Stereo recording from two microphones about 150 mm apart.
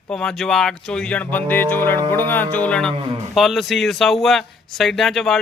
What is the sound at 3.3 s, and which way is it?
Speech, centre (ahead or behind).